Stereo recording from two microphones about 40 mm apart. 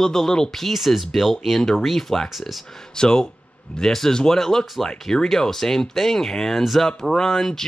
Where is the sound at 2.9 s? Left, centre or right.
Centre.